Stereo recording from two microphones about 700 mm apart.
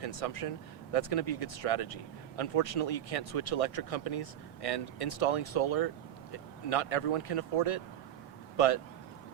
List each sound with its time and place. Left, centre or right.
0.0 s speech: left